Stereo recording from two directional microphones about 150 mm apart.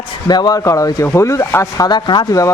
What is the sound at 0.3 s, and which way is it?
Speech, 25° left (ahead or behind).